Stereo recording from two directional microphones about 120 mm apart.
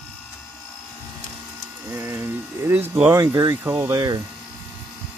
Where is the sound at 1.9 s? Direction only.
20° right (ahead or behind).